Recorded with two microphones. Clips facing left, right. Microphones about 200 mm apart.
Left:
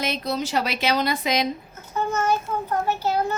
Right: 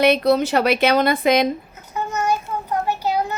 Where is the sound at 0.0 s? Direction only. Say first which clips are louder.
Right 11 dB; 65° right (ahead or behind).